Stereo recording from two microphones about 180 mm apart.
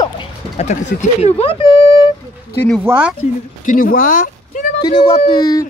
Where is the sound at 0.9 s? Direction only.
55° left (ahead or behind).